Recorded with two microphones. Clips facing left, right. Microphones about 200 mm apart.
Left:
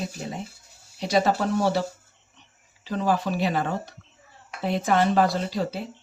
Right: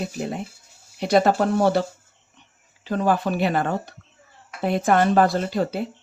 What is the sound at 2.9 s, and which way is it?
Speech, 55° right (ahead or behind).